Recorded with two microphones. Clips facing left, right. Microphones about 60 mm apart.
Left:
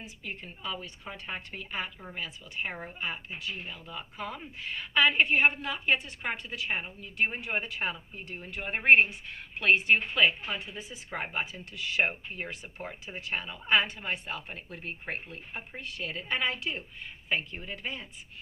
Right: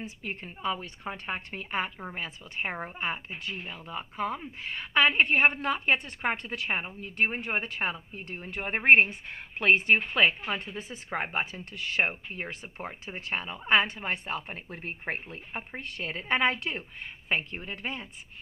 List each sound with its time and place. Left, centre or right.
0.0 s a woman's voice: right